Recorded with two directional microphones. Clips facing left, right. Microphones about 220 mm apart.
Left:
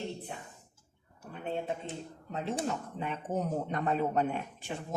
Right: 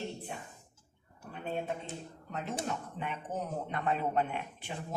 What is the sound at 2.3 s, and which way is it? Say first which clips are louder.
Speech: left 3 dB; 30° left (ahead or behind).